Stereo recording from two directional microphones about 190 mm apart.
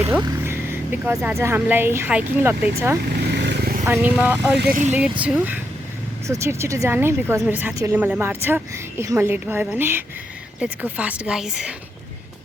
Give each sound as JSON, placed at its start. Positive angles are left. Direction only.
{"t": 0.0, "sound": "speech", "side_deg": -15}
{"t": 3.3, "sound": "vehicle", "side_deg": -65}
{"t": 3.8, "sound": "speech", "side_deg": -10}
{"t": 4.7, "sound": "speech", "side_deg": -40}
{"t": 4.9, "sound": "speech", "side_deg": -5}